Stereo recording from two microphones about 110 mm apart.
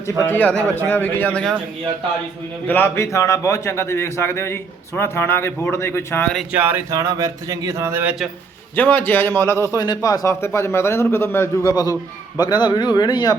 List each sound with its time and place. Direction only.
0.2 s a man's voice: 20° left (ahead or behind)
2.6 s a man's voice: 20° left (ahead or behind)
6.5 s speech: 15° right (ahead or behind)
6.9 s speech: 30° right (ahead or behind)
8.7 s a man's voice: 15° left (ahead or behind)
9.7 s a man's voice: 35° left (ahead or behind)
11.7 s speech: 35° left (ahead or behind)